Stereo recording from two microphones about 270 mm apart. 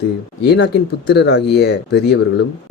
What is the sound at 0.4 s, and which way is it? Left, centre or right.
Speech, left.